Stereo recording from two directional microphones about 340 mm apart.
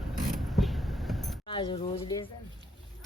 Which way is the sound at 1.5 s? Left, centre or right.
Centre.